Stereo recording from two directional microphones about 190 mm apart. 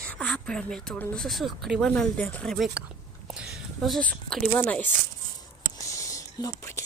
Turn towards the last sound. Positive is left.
turn(degrees=15)  # may be behind; listen again after turning